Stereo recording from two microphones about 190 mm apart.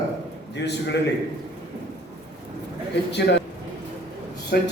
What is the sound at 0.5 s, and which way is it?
Speech, 65° left (ahead or behind).